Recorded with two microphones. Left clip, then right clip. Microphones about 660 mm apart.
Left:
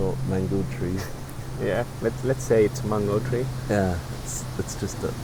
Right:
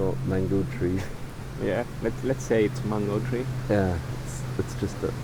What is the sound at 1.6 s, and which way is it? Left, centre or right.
Speech, left.